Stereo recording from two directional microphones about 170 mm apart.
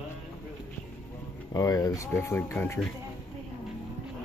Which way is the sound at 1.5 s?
20° left (ahead or behind).